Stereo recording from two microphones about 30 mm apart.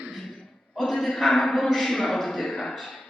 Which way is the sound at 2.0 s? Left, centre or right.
Centre.